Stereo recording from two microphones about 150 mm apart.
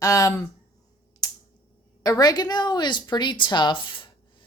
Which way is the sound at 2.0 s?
25° left (ahead or behind).